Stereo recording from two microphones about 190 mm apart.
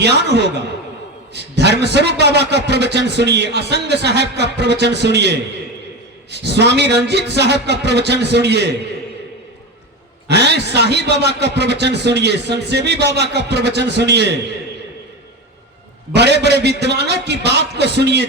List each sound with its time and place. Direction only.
0.0 s a man's voice: 60° right (ahead or behind)
10.2 s a man's voice: 60° right (ahead or behind)
16.1 s a man's voice: 60° right (ahead or behind)